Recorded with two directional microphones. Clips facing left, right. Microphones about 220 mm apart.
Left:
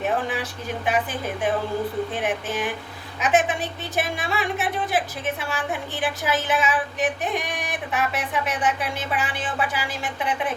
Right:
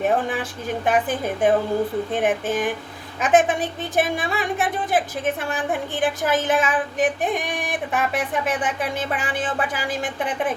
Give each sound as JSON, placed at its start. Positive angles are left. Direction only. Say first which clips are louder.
{"t": 0.0, "sound": "a woman's voice", "louder": "right 3 dB", "side_deg": -50}